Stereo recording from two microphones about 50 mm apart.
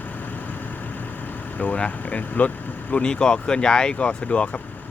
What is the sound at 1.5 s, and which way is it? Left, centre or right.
Speech, left.